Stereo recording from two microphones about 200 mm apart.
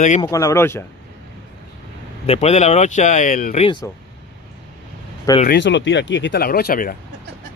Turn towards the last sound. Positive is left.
turn(degrees=45)  # may be behind; listen again after turning